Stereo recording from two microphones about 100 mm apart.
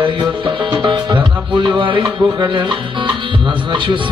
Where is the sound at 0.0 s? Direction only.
50° right (ahead or behind).